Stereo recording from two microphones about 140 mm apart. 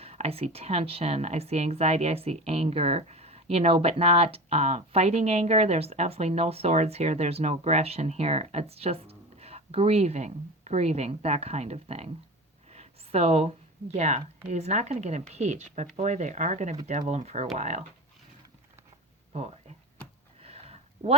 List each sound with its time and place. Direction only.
0.0 s speech: 45° right (ahead or behind)
19.3 s speech: 50° right (ahead or behind)
20.4 s a sound: 45° right (ahead or behind)